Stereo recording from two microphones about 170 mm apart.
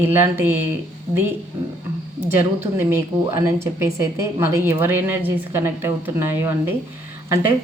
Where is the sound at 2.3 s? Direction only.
15° right (ahead or behind).